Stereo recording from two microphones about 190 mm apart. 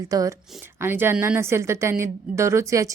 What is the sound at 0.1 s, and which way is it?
A woman's voice, 20° right (ahead or behind).